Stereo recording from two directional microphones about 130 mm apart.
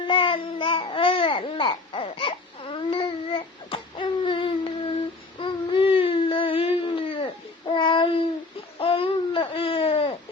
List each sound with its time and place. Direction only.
0.0 s babbling: 40° left (ahead or behind)
5.4 s baby cry: 40° left (ahead or behind)
8.8 s a sound: 45° left (ahead or behind)